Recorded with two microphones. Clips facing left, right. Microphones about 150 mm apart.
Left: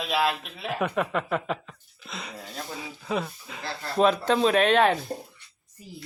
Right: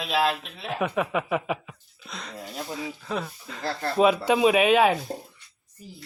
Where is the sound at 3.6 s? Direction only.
45° right (ahead or behind).